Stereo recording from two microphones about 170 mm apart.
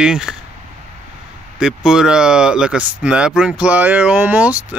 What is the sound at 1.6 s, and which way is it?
Speech, 5° right (ahead or behind).